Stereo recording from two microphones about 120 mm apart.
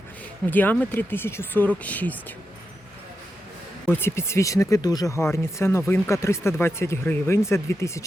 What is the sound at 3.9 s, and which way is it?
Speech, 20° left (ahead or behind).